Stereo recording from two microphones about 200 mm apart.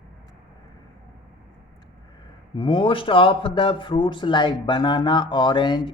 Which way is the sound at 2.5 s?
25° left (ahead or behind).